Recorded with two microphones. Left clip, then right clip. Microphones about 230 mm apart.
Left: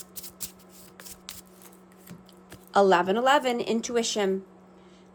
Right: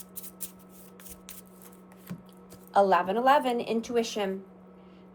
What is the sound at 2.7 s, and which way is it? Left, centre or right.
Speech, left.